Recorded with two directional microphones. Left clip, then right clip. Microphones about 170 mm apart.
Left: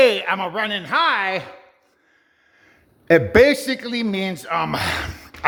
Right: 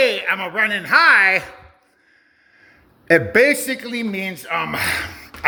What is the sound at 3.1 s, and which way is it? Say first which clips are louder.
A man's voice: left 1 dB; 25° left (ahead or behind).